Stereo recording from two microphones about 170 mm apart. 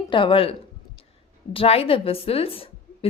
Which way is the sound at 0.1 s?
30° left (ahead or behind).